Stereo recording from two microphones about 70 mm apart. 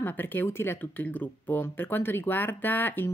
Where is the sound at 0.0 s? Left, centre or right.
Left.